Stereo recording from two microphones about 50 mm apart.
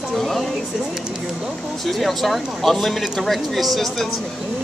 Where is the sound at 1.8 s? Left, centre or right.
Centre.